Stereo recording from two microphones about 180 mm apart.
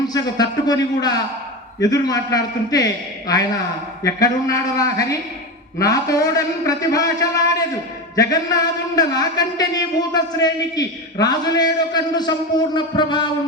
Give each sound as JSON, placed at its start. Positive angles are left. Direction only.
{"t": 0.1, "sound": "a man's voice", "side_deg": 20}